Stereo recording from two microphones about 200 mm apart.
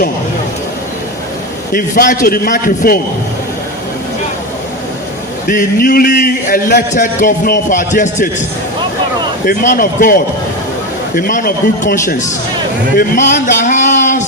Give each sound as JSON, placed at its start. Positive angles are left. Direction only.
{"t": 1.7, "sound": "a man's voice", "side_deg": 45}
{"t": 5.5, "sound": "a man's voice", "side_deg": 40}
{"t": 9.5, "sound": "a man's voice", "side_deg": 45}